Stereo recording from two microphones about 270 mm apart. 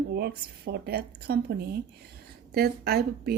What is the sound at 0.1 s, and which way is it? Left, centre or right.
Speech, right.